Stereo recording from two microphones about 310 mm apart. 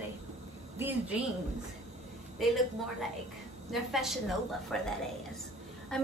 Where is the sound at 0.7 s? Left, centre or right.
Centre.